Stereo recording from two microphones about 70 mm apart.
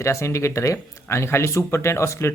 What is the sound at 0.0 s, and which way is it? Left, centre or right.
Speech, left.